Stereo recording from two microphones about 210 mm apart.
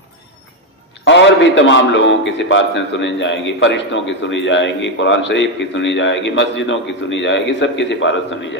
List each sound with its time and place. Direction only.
1.0 s a man's voice: 60° left (ahead or behind)